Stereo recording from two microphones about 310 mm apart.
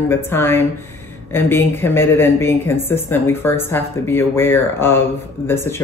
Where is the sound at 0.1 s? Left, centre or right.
Centre.